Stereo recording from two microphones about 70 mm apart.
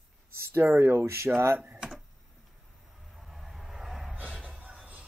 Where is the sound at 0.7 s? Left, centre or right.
Right.